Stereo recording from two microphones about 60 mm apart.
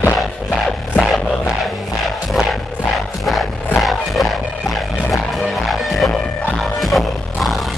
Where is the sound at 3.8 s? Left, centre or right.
Centre.